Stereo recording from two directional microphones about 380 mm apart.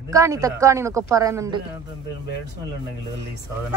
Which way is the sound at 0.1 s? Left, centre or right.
Centre.